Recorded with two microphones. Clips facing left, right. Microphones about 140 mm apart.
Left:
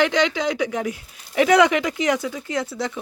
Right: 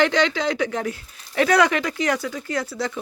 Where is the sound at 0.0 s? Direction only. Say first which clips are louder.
Even; 15° left (ahead or behind).